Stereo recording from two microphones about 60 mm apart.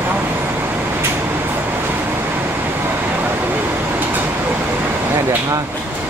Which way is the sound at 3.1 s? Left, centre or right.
Right.